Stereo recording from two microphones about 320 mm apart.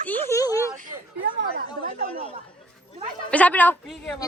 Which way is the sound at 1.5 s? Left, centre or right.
Right.